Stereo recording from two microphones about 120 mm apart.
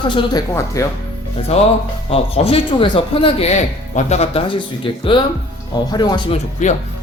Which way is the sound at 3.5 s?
70° left (ahead or behind).